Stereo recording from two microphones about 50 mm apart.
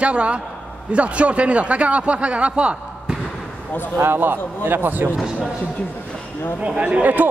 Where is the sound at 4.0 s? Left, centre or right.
Right.